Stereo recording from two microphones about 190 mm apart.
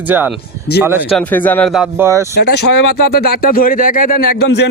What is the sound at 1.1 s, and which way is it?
Speech, 5° left (ahead or behind).